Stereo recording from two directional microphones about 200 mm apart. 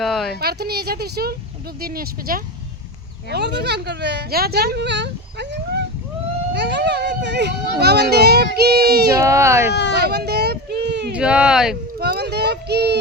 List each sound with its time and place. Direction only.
0.0 s speech: centre (ahead or behind)
0.3 s a child's voice: 50° right (ahead or behind)
9.2 s speech: 15° right (ahead or behind)
10.0 s speech: 55° right (ahead or behind)
11.1 s speech: 5° right (ahead or behind)
11.9 s speech: 50° right (ahead or behind)